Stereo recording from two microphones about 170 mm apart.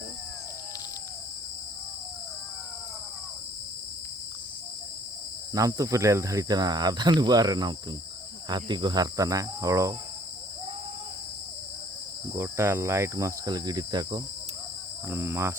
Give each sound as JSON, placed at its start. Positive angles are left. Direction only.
{"t": 5.5, "sound": "speech", "side_deg": -20}
{"t": 12.4, "sound": "cricket", "side_deg": -15}